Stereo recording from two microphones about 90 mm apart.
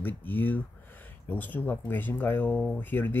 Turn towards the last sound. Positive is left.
turn(degrees=20)  # may be behind; listen again after turning